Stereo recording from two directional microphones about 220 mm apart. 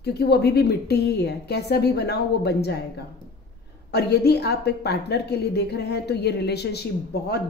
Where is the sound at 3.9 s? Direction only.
45° left (ahead or behind).